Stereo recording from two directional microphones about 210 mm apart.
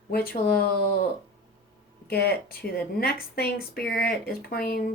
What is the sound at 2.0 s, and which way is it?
A woman's voice, 50° left (ahead or behind).